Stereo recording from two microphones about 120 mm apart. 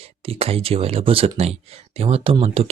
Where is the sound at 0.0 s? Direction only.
55° right (ahead or behind).